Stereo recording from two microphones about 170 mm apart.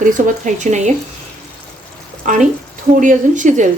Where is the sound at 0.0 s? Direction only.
50° right (ahead or behind).